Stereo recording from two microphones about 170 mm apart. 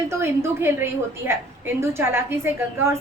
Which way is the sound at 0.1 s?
15° right (ahead or behind).